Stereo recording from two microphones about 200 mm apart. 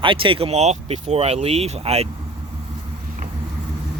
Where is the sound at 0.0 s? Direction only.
25° right (ahead or behind).